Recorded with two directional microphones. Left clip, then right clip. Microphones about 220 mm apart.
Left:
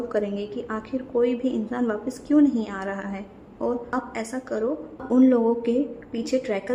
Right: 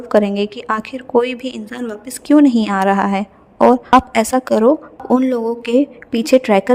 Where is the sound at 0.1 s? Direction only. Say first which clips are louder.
Right 17 dB; 45° right (ahead or behind).